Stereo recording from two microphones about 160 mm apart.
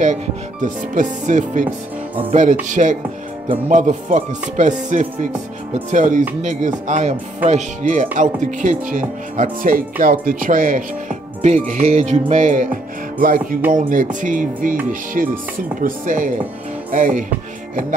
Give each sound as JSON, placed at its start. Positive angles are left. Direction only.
{"t": 0.0, "sound": "speech", "side_deg": -50}
{"t": 2.7, "sound": "speech", "side_deg": -50}
{"t": 13.7, "sound": "speech", "side_deg": -55}